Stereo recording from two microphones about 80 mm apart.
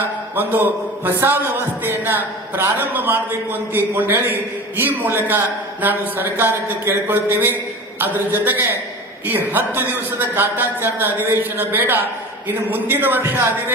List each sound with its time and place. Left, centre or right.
0.3 s a man's voice: right